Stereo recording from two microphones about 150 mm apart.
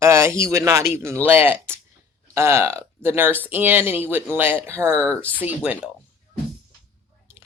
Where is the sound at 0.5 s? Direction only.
20° right (ahead or behind).